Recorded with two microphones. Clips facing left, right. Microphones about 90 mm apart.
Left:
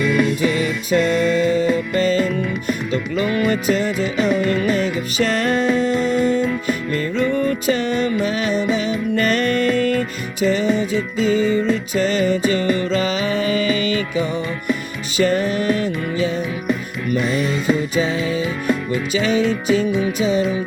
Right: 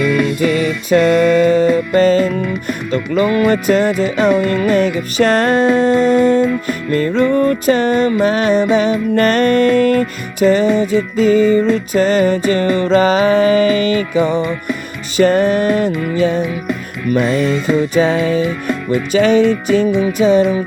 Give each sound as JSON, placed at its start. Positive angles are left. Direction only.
{"t": 0.0, "sound": "music", "side_deg": 0}
{"t": 0.4, "sound": "music", "side_deg": -45}
{"t": 17.2, "sound": "music", "side_deg": 0}
{"t": 17.7, "sound": "music", "side_deg": -50}
{"t": 18.4, "sound": "music", "side_deg": 0}
{"t": 19.1, "sound": "music", "side_deg": -45}